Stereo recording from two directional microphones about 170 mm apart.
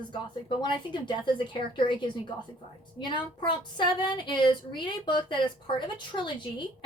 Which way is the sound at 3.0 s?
25° left (ahead or behind).